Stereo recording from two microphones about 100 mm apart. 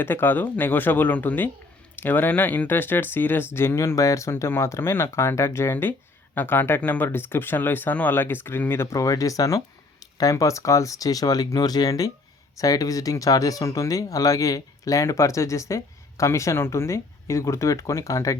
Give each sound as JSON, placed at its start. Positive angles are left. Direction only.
{"t": 0.0, "sound": "speech", "side_deg": 20}